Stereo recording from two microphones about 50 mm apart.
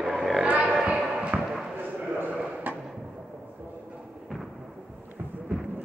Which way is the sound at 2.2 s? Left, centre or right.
Right.